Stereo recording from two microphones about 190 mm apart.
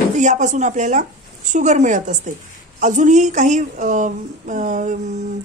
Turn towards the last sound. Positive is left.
turn(degrees=-40)  # may be behind; listen again after turning